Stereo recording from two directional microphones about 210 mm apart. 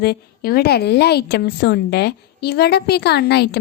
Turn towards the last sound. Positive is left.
turn(degrees=50)  # may be behind; listen again after turning